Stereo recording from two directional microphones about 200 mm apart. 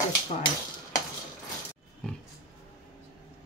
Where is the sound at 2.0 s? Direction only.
5° left (ahead or behind).